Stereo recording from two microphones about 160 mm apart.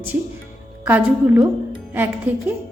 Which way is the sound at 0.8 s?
15° right (ahead or behind).